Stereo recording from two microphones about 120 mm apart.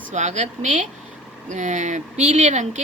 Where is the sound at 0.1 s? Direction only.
75° right (ahead or behind).